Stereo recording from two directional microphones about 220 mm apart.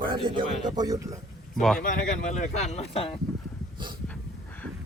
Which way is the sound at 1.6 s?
Centre (ahead or behind).